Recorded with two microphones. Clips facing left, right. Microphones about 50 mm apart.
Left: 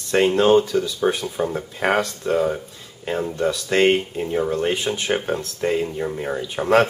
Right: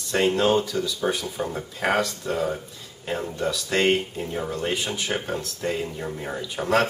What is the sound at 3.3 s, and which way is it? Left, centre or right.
Speech, left.